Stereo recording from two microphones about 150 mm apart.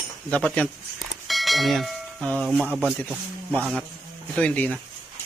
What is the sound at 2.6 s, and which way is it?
Speech, 5° right (ahead or behind).